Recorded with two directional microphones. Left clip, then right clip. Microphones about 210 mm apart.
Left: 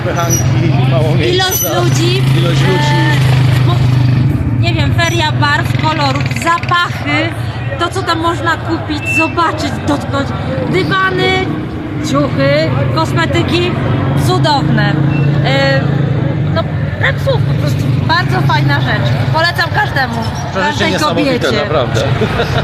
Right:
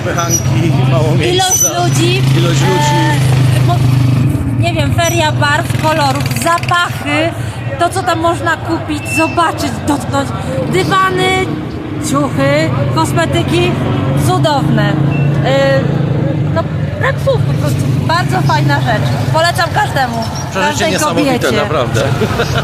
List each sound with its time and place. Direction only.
1.3 s speech: 20° right (ahead or behind)
4.6 s speech: 20° right (ahead or behind)
21.2 s speech: 20° right (ahead or behind)